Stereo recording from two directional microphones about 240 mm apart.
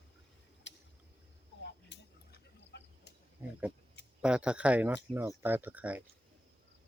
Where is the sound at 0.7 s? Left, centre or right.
Left.